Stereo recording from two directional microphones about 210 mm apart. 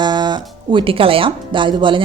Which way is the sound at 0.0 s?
20° right (ahead or behind).